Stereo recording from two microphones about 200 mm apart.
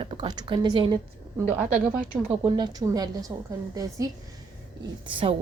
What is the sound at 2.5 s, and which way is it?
Speech, 20° right (ahead or behind).